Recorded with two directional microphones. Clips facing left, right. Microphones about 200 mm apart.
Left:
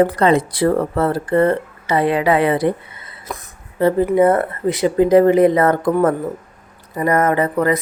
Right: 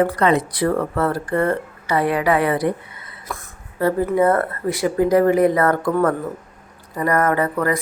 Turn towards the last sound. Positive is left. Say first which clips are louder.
# left 3 dB
turn(degrees=20)  # may be behind; listen again after turning